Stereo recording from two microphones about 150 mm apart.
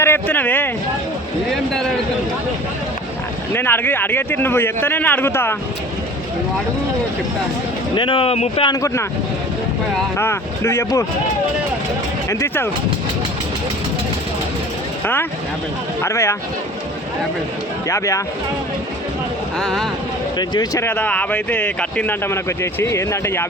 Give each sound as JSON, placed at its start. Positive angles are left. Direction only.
{"t": 0.0, "sound": "speech", "side_deg": 15}
{"t": 3.5, "sound": "speech", "side_deg": 15}
{"t": 7.9, "sound": "speech", "side_deg": 35}
{"t": 8.7, "sound": "speech", "side_deg": 20}
{"t": 10.2, "sound": "speech", "side_deg": 15}
{"t": 12.3, "sound": "speech", "side_deg": 20}
{"t": 15.0, "sound": "speech", "side_deg": 15}
{"t": 17.8, "sound": "speech", "side_deg": 20}
{"t": 19.5, "sound": "speech", "side_deg": 0}
{"t": 20.4, "sound": "speech", "side_deg": 25}
{"t": 20.8, "sound": "speech", "side_deg": 10}